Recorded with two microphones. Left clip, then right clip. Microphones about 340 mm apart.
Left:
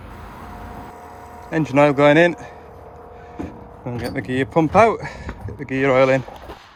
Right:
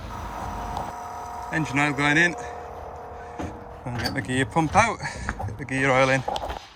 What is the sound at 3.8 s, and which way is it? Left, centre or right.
Speech, centre.